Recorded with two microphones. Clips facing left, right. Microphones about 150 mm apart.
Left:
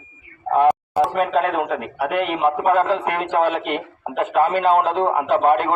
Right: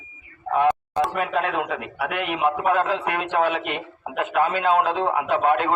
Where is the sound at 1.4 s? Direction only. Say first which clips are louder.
Left 4 dB; 50° left (ahead or behind).